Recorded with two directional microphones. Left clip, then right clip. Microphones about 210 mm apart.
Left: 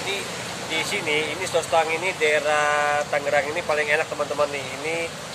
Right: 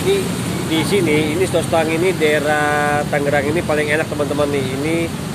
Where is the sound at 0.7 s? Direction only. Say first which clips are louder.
Right 7 dB; centre (ahead or behind).